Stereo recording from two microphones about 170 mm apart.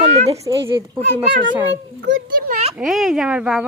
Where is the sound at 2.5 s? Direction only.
40° right (ahead or behind).